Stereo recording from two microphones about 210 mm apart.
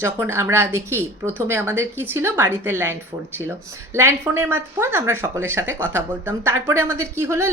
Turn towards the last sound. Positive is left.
turn(degrees=-15)  # may be behind; listen again after turning